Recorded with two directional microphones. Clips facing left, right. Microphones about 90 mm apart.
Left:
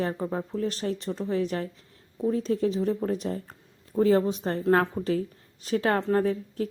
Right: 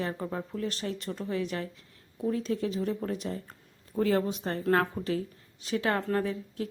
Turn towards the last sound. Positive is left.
turn(degrees=35)  # may be behind; listen again after turning